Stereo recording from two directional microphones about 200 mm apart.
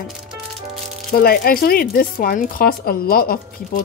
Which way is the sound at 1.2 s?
50° left (ahead or behind).